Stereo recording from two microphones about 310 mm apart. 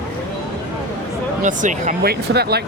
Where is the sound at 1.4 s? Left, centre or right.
Right.